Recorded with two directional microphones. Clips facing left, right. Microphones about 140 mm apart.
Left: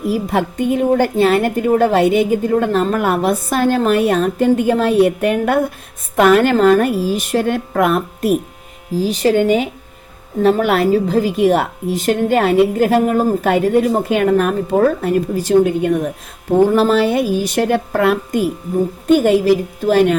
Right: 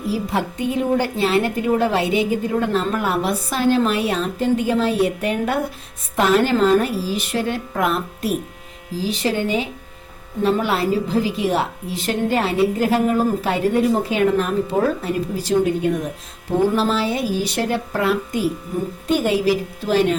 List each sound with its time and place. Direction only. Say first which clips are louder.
0.1 s a woman's voice: left 4 dB; 55° left (ahead or behind)